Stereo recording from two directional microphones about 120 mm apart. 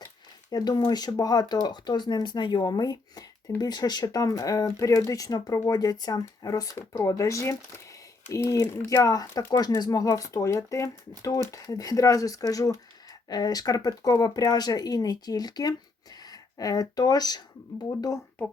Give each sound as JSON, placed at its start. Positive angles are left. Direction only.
{"t": 0.5, "sound": "speech", "side_deg": 35}